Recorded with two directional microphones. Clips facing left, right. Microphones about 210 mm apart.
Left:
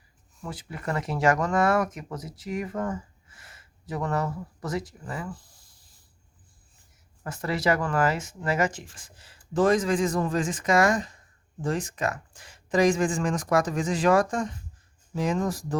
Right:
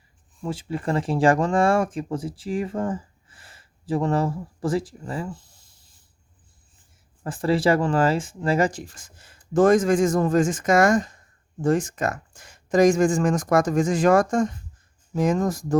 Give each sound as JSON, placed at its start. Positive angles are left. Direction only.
{"t": 0.4, "sound": "speech", "side_deg": -25}
{"t": 7.3, "sound": "speech", "side_deg": -30}